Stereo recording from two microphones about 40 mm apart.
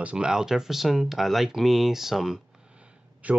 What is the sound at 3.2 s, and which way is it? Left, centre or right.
Speech, right.